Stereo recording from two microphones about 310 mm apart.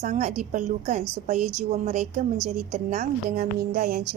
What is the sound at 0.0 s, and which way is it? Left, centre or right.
A woman's voice, right.